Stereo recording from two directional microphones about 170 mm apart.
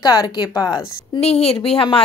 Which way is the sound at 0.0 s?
25° left (ahead or behind).